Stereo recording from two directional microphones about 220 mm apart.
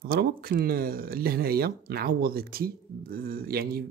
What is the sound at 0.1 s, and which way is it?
Speech, 45° right (ahead or behind).